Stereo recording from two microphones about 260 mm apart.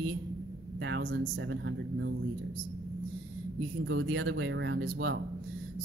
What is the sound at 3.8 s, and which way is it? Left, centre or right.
Speech, right.